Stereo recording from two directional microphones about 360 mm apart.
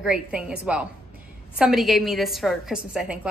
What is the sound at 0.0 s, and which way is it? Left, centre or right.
A woman's voice, centre.